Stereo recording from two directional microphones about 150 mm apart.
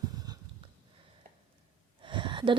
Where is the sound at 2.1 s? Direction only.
35° right (ahead or behind).